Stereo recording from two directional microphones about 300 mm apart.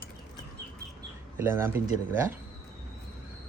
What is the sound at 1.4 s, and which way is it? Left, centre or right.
Speech, centre.